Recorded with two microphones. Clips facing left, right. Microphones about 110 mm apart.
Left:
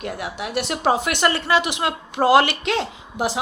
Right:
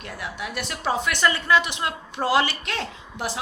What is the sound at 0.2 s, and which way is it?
A woman's voice, 75° left (ahead or behind).